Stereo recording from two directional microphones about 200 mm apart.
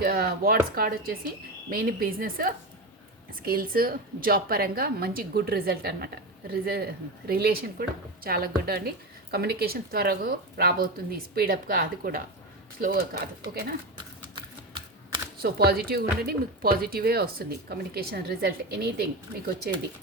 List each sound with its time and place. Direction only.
0.0 s speech: 50° right (ahead or behind)
13.5 s speech: 50° right (ahead or behind)
14.3 s typing: 25° right (ahead or behind)
15.4 s speech: 50° right (ahead or behind)